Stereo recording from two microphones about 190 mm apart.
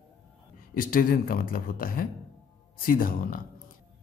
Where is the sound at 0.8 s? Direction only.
50° left (ahead or behind).